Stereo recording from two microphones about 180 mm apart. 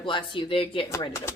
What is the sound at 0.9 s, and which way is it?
Speech, 15° left (ahead or behind).